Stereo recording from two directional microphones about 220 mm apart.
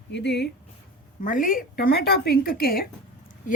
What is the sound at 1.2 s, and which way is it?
Speech, 35° left (ahead or behind).